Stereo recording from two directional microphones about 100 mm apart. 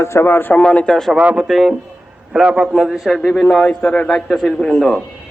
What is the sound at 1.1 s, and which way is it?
A man's voice, 10° right (ahead or behind).